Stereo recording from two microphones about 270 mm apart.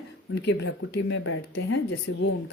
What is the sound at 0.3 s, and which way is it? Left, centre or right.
Speech, left.